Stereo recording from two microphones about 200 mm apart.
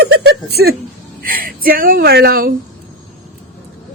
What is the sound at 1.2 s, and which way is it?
Speech, 45° right (ahead or behind).